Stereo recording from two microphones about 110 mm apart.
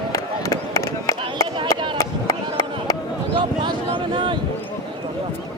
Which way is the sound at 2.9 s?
30° left (ahead or behind).